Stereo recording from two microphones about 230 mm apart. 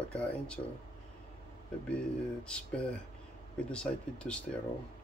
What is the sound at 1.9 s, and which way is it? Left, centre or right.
Speech, centre.